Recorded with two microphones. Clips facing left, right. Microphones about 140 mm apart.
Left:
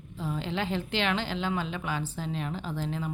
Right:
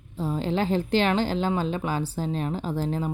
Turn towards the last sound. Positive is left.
turn(degrees=-40)  # may be behind; listen again after turning